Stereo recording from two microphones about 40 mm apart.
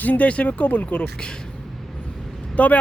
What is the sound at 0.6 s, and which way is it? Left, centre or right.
Speech, left.